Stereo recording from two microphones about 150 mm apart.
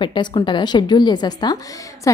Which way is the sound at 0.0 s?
35° left (ahead or behind).